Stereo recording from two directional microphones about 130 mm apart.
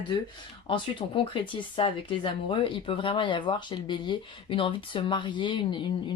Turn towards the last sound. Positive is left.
turn(degrees=35)  # may be behind; listen again after turning